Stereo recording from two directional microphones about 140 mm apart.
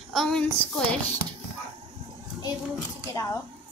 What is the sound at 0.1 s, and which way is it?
Speech, 5° left (ahead or behind).